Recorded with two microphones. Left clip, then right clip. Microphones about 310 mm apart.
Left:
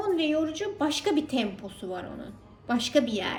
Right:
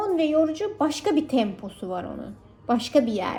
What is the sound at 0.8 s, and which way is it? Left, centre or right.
A woman's voice, centre.